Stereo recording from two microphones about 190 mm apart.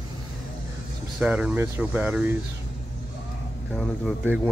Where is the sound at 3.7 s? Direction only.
Centre (ahead or behind).